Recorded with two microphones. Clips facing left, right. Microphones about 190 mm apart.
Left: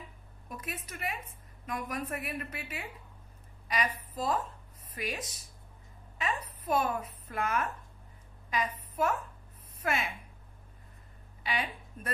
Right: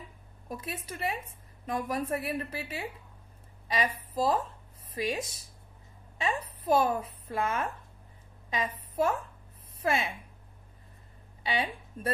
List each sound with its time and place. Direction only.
0.5 s a woman's voice: 30° right (ahead or behind)
11.4 s speech: 30° right (ahead or behind)